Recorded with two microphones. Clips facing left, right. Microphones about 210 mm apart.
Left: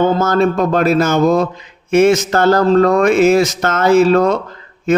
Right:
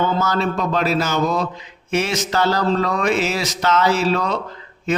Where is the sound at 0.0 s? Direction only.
50° left (ahead or behind).